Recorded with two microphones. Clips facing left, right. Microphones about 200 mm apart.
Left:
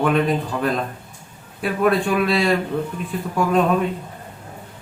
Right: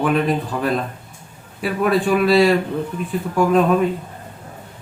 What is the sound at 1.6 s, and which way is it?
Speech, centre (ahead or behind).